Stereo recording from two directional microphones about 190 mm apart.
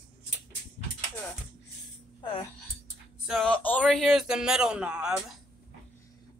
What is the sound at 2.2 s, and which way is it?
Speech, 25° left (ahead or behind).